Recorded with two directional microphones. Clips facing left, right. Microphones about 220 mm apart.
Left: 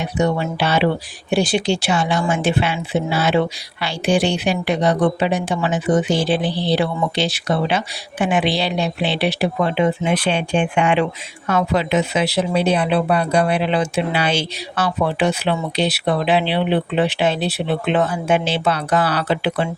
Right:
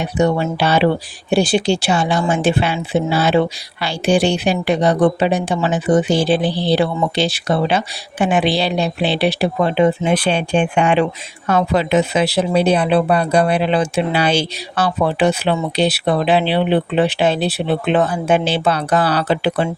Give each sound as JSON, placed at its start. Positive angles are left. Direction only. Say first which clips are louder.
{"t": 0.0, "sound": "speech", "louder": "right 3 dB", "side_deg": -35}